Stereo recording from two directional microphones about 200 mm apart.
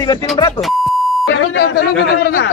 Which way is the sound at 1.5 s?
55° left (ahead or behind).